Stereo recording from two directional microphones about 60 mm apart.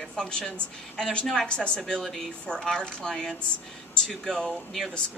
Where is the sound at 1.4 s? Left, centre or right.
Centre.